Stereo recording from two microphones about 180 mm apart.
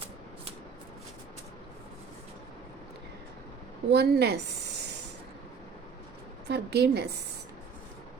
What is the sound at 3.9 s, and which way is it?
Speech, 65° right (ahead or behind).